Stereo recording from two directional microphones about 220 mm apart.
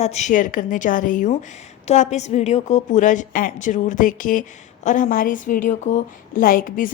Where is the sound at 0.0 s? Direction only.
30° left (ahead or behind).